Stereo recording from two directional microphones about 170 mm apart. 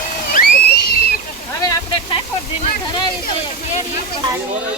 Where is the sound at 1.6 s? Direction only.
20° left (ahead or behind).